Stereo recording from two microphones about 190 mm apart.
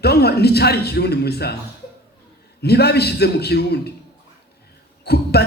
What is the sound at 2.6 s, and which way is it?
A man's voice, 60° left (ahead or behind).